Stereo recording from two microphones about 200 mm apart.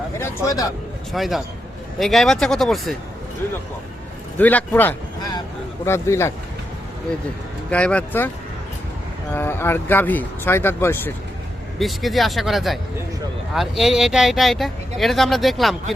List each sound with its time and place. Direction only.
0.2 s a man's voice: 15° left (ahead or behind)
1.1 s speech: centre (ahead or behind)
4.4 s speech: 10° left (ahead or behind)
7.7 s speech: 5° left (ahead or behind)
9.3 s speech: 10° left (ahead or behind)
11.8 s speech: centre (ahead or behind)